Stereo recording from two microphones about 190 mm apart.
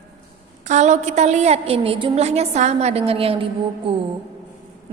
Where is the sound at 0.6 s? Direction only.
40° right (ahead or behind).